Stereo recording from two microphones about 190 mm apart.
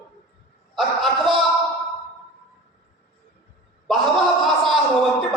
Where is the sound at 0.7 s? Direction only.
Centre (ahead or behind).